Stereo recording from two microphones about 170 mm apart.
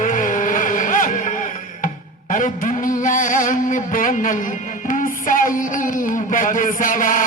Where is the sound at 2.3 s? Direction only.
50° left (ahead or behind).